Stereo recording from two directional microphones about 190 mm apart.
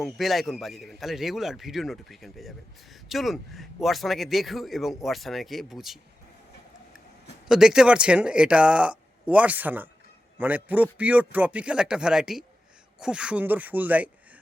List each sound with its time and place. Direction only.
0.0 s speech: centre (ahead or behind)
7.4 s a man's voice: centre (ahead or behind)